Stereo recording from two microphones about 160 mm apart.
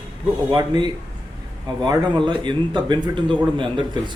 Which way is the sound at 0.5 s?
30° right (ahead or behind).